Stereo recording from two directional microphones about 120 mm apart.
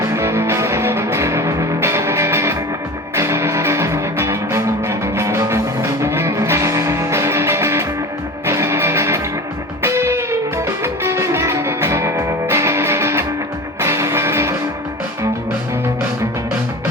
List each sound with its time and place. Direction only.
0.0 s music: 20° right (ahead or behind)